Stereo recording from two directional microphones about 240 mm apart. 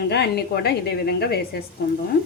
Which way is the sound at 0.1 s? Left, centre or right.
Left.